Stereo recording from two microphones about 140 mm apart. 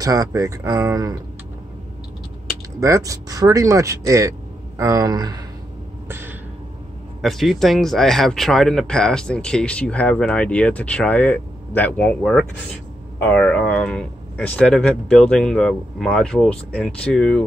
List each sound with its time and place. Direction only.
0.0 s speech: 25° right (ahead or behind)
2.8 s speech: 25° right (ahead or behind)
6.0 s a sound: 15° right (ahead or behind)
7.2 s speech: centre (ahead or behind)